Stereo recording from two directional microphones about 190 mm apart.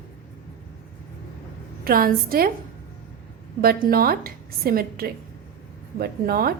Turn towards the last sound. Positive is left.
turn(degrees=-50)  # may be behind; listen again after turning